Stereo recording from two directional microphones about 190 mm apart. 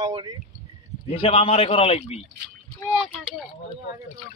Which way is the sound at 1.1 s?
30° left (ahead or behind).